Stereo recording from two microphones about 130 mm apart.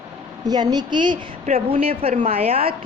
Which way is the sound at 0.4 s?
30° right (ahead or behind).